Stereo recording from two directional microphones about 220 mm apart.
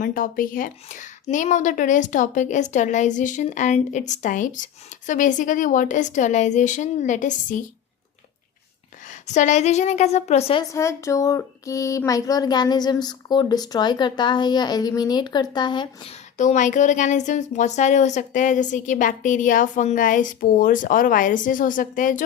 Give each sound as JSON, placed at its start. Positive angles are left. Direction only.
{"t": 0.0, "sound": "a woman's voice", "side_deg": 40}
{"t": 9.0, "sound": "a woman's voice", "side_deg": 35}
{"t": 10.6, "sound": "speech", "side_deg": 15}
{"t": 16.4, "sound": "a woman's voice", "side_deg": 35}